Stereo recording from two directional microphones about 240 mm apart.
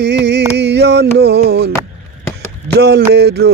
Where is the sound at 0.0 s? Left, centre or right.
Right.